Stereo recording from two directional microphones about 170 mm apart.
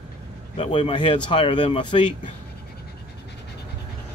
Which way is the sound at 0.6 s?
30° left (ahead or behind).